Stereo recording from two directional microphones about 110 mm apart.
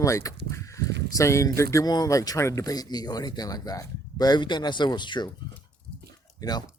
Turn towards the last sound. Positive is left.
turn(degrees=35)  # may be behind; listen again after turning